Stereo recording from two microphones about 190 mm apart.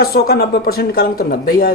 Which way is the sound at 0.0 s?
55° left (ahead or behind).